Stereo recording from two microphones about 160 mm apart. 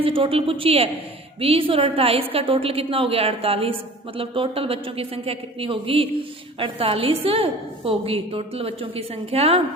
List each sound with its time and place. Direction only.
0.0 s a woman's voice: 35° right (ahead or behind)